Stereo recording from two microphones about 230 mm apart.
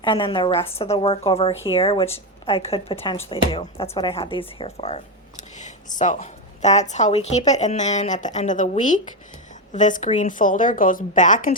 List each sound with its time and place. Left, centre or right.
0.0 s speech: left